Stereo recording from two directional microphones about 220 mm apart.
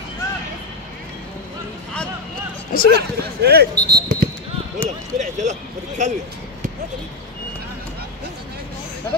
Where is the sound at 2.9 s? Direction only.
45° right (ahead or behind).